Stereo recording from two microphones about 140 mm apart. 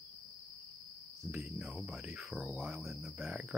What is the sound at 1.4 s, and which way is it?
Speech, centre (ahead or behind).